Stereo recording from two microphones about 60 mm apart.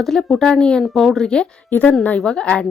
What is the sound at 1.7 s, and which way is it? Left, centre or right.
Speech, left.